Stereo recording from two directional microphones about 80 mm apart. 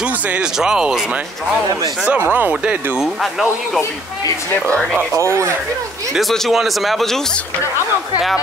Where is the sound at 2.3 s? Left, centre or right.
Centre.